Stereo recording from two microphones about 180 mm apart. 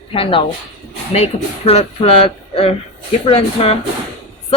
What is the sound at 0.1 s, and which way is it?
Speech, 30° left (ahead or behind).